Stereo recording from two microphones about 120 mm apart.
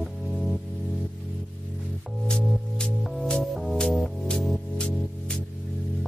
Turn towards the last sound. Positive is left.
turn(degrees=10)  # may be behind; listen again after turning